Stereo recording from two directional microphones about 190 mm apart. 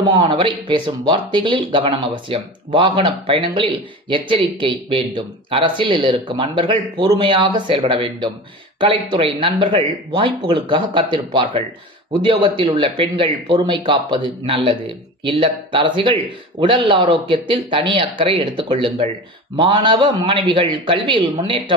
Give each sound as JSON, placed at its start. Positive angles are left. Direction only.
{"t": 0.0, "sound": "speech", "side_deg": -25}